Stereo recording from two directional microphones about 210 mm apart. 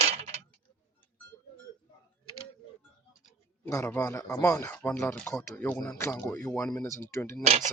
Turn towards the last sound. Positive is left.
turn(degrees=-30)  # may be behind; listen again after turning